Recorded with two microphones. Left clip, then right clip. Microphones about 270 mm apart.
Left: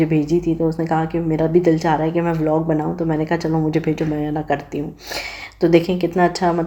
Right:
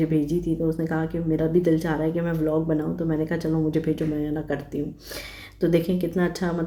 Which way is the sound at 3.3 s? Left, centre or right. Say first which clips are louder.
Left 6 dB; centre.